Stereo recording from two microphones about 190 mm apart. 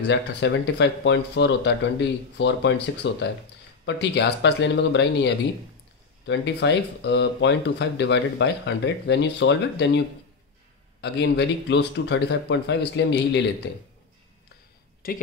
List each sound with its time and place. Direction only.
0.0 s speech: 70° left (ahead or behind)
15.0 s speech: 50° left (ahead or behind)